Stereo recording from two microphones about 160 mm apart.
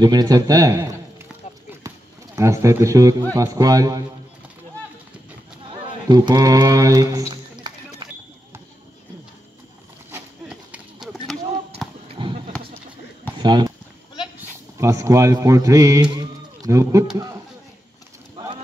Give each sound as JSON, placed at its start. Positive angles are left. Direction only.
{"t": 0.0, "sound": "a man's voice", "side_deg": -25}
{"t": 2.3, "sound": "a man's voice", "side_deg": -20}
{"t": 6.0, "sound": "speech", "side_deg": -25}
{"t": 8.0, "sound": "a sound", "side_deg": -30}
{"t": 10.1, "sound": "horse", "side_deg": -10}
{"t": 12.1, "sound": "basketball bounce", "side_deg": -35}
{"t": 13.4, "sound": "a sound", "side_deg": -25}
{"t": 14.8, "sound": "a man's voice", "side_deg": -20}